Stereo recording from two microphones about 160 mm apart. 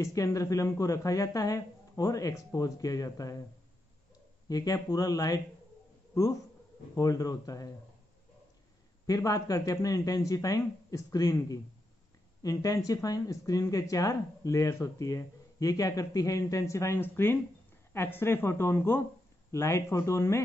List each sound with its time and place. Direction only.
0.0 s speech: 20° left (ahead or behind)
4.5 s speech: 20° left (ahead or behind)
7.0 s speech: 20° left (ahead or behind)
9.0 s a woman's voice: 20° left (ahead or behind)